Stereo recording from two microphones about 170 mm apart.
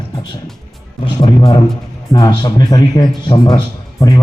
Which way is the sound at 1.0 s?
25° left (ahead or behind).